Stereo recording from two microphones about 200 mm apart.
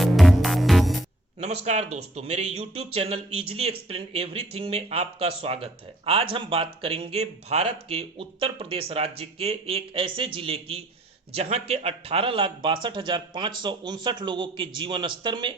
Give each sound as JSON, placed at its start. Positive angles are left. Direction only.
{"t": 0.0, "sound": "music", "side_deg": 0}
{"t": 1.6, "sound": "speech", "side_deg": -35}